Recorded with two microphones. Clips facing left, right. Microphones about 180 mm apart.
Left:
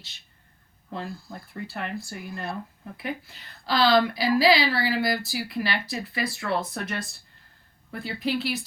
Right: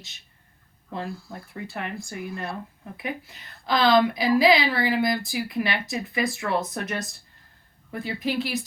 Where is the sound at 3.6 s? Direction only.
20° right (ahead or behind).